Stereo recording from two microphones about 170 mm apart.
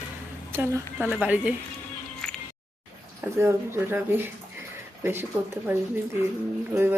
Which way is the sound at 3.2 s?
15° right (ahead or behind).